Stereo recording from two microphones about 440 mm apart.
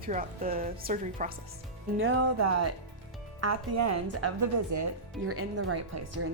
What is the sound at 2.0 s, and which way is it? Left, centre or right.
Speech, right.